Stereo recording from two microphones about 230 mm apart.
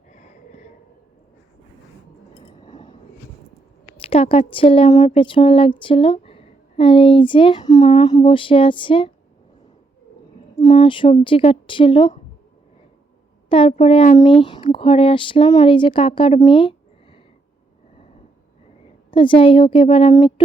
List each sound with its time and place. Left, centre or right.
0.1 s snort: left
2.6 s a sound: left
3.9 s speech: left
10.6 s speech: left
13.5 s speech: left
19.1 s speech: left